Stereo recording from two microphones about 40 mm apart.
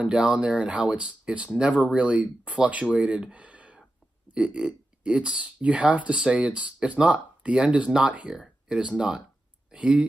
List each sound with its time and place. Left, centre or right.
0.0 s speech: right